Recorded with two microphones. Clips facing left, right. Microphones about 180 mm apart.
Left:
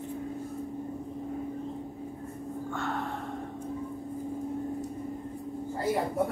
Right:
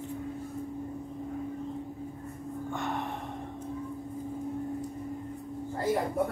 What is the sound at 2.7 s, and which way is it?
Gasp, 20° right (ahead or behind).